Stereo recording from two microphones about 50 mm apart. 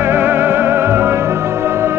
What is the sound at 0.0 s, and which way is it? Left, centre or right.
Music, right.